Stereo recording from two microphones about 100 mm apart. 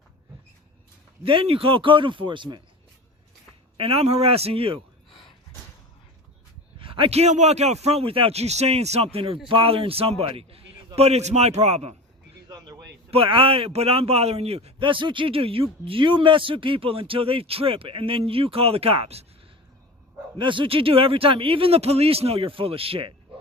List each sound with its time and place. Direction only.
1.2 s speech: 60° right (ahead or behind)
3.8 s speech: 70° right (ahead or behind)
6.7 s a man's voice: 60° right (ahead or behind)
10.9 s a man's voice: 90° right
12.5 s a sound: 45° right (ahead or behind)
13.1 s speech: 65° right (ahead or behind); by 19.2 s 80° right
20.4 s speech: 55° right (ahead or behind)